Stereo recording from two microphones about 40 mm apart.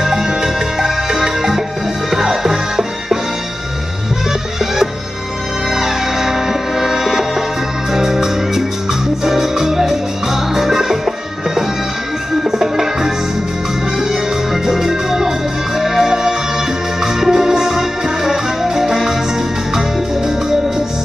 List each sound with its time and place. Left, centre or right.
0.0 s music: centre
5.7 s music: centre